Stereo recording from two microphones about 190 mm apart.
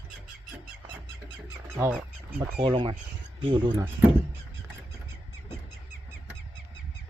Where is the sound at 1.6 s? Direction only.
15° right (ahead or behind).